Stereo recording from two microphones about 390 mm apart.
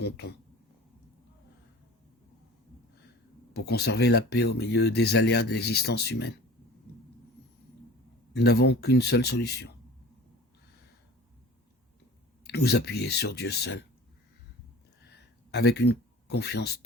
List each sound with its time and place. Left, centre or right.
3.5 s speech: left
8.3 s speech: left
12.5 s speech: left
15.0 s a sound: left